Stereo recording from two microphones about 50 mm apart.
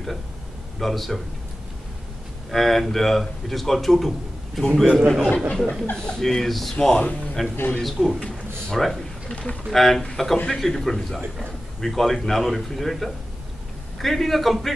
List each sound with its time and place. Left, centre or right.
0.7 s a man's voice: centre
2.5 s a man's voice: centre
5.5 s a man's voice: centre
9.3 s speech: left
9.7 s a man's voice: centre